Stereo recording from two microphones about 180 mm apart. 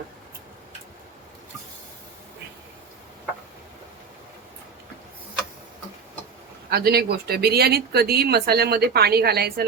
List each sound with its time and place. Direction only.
6.7 s speech: 60° right (ahead or behind)